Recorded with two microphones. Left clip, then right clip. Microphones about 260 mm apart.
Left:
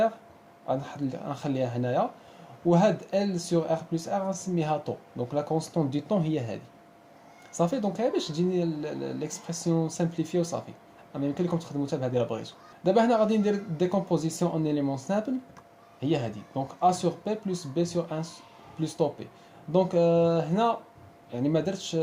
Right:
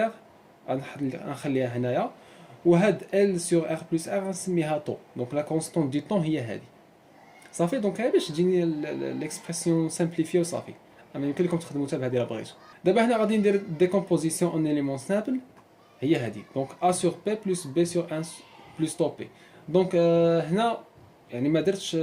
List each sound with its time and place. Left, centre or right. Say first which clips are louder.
0.7 s speech: even; left
16.0 s speech: right 3 dB; left